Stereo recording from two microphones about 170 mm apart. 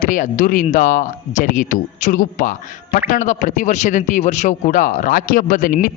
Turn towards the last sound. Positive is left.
turn(degrees=55)  # may be behind; listen again after turning